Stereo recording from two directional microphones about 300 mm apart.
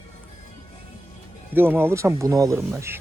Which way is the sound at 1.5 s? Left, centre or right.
Centre.